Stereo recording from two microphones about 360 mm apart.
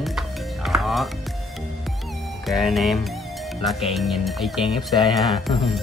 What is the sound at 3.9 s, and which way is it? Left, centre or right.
Speech, centre.